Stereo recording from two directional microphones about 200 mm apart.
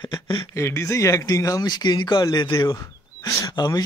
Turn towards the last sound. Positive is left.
turn(degrees=20)  # may be behind; listen again after turning